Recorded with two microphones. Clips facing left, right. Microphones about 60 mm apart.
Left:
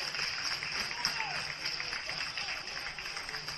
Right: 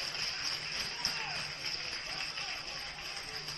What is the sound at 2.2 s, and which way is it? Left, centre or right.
Music, left.